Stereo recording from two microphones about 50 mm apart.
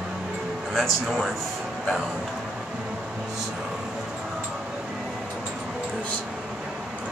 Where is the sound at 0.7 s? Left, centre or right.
Centre.